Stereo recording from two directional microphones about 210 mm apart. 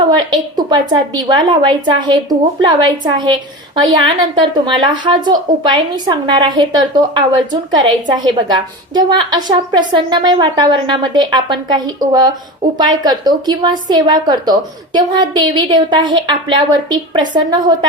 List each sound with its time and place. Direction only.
0.2 s a woman's voice: 20° right (ahead or behind)
4.4 s a woman's voice: 20° right (ahead or behind)